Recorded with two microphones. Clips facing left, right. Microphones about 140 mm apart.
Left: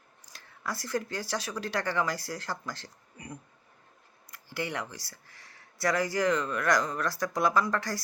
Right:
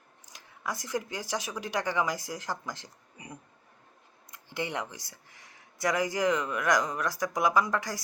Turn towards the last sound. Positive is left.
turn(degrees=-15)  # may be behind; listen again after turning